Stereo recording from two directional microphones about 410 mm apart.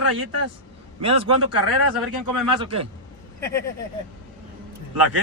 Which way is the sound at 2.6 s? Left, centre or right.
Centre.